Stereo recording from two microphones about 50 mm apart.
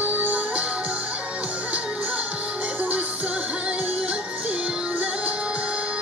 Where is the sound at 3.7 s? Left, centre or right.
Right.